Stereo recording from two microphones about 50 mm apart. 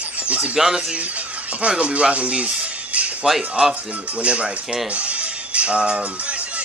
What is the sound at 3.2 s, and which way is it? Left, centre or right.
Speech, centre.